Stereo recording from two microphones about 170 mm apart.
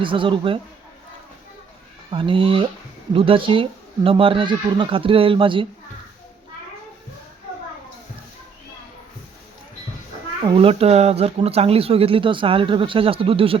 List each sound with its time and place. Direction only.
0.0 s speech: 30° right (ahead or behind)
2.0 s speech: 30° right (ahead or behind)
10.4 s speech: 30° right (ahead or behind)